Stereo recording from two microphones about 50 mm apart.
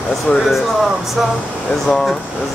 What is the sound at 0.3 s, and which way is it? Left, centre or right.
Speech, left.